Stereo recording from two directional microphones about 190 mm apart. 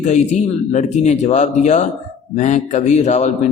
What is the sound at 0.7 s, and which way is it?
A man's voice, 40° left (ahead or behind).